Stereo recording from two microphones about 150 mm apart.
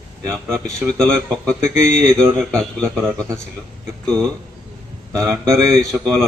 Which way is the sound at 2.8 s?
15° right (ahead or behind).